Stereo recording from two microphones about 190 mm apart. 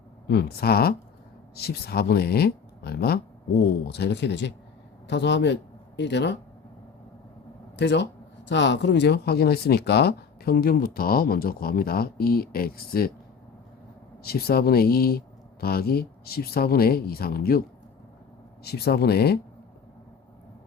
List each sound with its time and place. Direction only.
0.3 s speech: 55° left (ahead or behind)
7.8 s speech: 65° left (ahead or behind)
14.2 s speech: 55° left (ahead or behind)
18.6 s speech: 55° left (ahead or behind)